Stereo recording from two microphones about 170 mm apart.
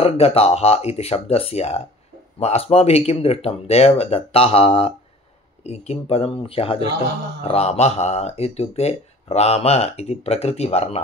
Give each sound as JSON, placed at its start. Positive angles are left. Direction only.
{"t": 0.0, "sound": "speech", "side_deg": 35}